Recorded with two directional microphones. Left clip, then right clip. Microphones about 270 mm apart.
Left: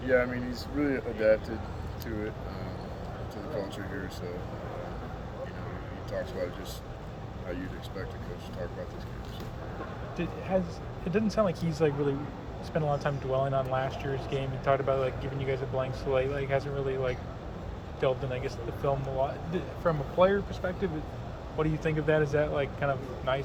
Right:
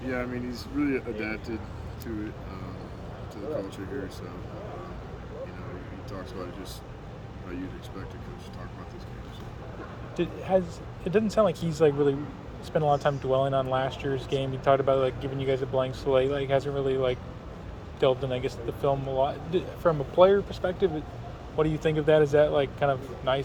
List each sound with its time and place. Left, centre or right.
0.1 s speech: centre
10.2 s speech: right